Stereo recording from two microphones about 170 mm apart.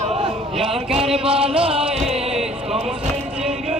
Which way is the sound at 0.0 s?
35° right (ahead or behind).